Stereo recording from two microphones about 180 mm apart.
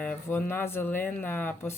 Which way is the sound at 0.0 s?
10° left (ahead or behind).